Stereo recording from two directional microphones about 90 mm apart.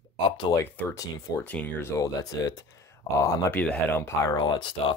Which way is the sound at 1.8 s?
35° left (ahead or behind).